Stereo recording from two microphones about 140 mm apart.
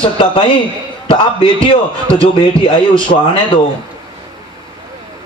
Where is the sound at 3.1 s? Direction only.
70° left (ahead or behind).